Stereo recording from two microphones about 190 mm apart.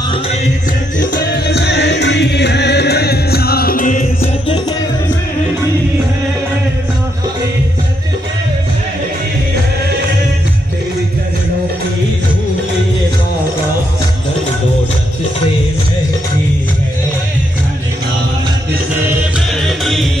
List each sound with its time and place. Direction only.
1.1 s music: 60° left (ahead or behind); by 4.3 s 45° left (ahead or behind)
19.8 s music: centre (ahead or behind)